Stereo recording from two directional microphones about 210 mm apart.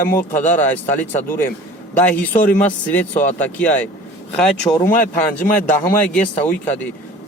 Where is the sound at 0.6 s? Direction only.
10° left (ahead or behind).